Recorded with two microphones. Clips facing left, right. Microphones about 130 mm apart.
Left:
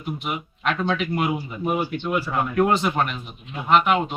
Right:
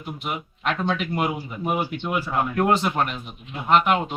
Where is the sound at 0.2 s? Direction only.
Centre (ahead or behind).